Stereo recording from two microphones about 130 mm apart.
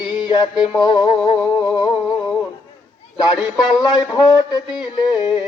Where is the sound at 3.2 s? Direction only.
30° left (ahead or behind).